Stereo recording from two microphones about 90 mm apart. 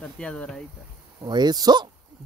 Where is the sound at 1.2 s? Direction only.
50° right (ahead or behind).